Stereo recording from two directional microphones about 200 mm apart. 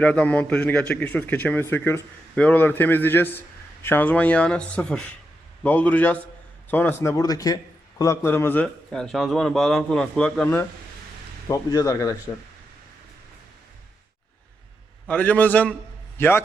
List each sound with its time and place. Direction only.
0.0 s a man's voice: 5° left (ahead or behind)
15.0 s a man's voice: 5° left (ahead or behind)